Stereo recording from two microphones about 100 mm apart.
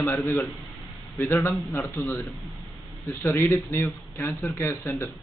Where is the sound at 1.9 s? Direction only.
25° left (ahead or behind).